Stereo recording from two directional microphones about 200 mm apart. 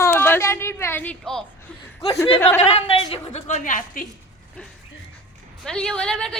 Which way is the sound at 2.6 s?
35° left (ahead or behind).